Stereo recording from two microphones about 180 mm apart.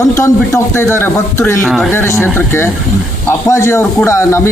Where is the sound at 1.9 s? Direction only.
15° left (ahead or behind).